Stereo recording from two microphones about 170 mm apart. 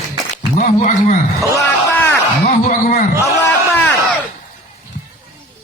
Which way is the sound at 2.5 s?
45° left (ahead or behind).